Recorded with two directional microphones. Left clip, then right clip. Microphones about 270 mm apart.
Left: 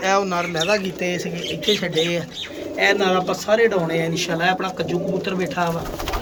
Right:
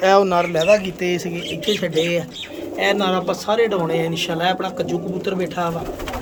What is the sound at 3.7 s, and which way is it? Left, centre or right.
Speech, right.